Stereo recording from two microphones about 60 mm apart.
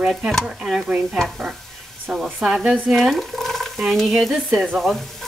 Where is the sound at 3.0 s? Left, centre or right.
Centre.